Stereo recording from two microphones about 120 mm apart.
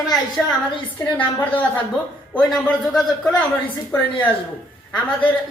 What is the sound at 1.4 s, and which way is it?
Speech, 15° left (ahead or behind).